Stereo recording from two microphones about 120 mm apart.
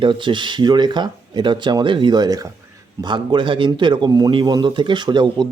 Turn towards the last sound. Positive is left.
turn(degrees=-40)  # may be behind; listen again after turning